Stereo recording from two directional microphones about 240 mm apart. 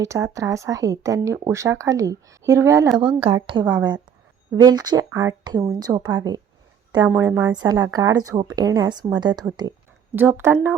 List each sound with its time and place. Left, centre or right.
0.0 s speech: centre
3.2 s a woman's voice: right